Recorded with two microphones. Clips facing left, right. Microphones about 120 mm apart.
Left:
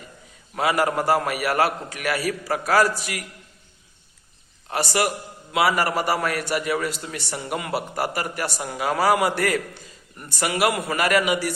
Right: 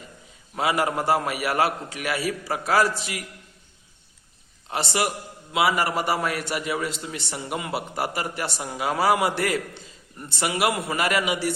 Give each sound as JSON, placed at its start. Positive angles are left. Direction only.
{"t": 0.5, "sound": "a man's voice", "side_deg": -20}
{"t": 4.7, "sound": "a man's voice", "side_deg": -25}